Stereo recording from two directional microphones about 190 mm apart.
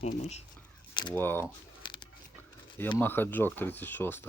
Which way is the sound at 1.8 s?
25° left (ahead or behind).